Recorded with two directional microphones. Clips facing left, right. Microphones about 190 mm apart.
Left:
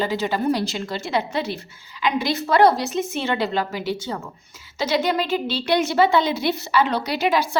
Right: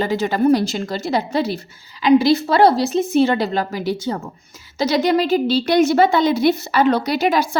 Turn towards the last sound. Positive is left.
turn(degrees=-45)  # may be behind; listen again after turning